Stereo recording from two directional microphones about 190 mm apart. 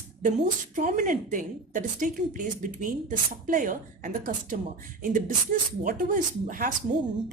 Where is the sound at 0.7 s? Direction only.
40° right (ahead or behind).